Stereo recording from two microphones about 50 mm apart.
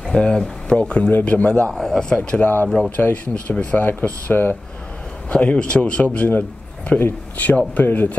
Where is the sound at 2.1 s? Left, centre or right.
Left.